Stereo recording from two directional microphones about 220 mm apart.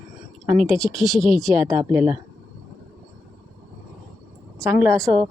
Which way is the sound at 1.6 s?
10° right (ahead or behind).